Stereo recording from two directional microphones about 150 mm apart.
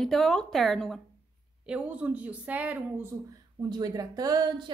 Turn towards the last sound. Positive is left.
turn(degrees=-25)  # may be behind; listen again after turning